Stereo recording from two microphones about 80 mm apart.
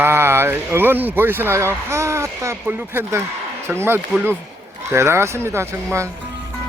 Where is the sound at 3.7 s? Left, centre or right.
Right.